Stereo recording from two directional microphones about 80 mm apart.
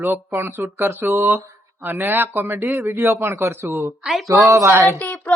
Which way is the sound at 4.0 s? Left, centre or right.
Centre.